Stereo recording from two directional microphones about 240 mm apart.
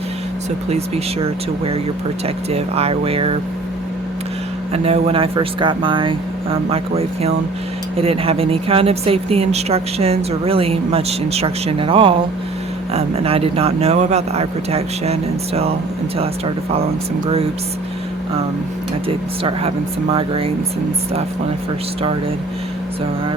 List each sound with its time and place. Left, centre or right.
0.7 s speech: right
4.7 s speech: right
19.0 s speech: right